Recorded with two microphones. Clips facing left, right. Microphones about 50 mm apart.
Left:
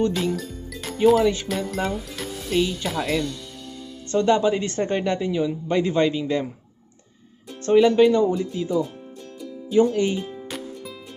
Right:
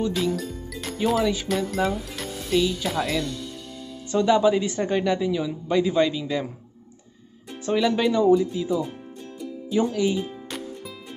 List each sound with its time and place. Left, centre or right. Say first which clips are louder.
0.0 s speech: left 2 dB; centre
7.7 s speech: left 6 dB; centre
9.4 s music: left 5 dB; centre